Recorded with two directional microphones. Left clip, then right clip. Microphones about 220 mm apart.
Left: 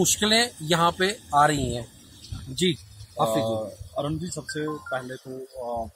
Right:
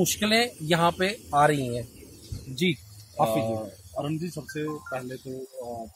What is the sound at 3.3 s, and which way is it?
Speech, 10° left (ahead or behind).